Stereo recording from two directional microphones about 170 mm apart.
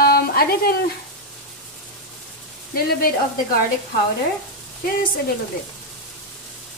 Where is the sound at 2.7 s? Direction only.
60° left (ahead or behind).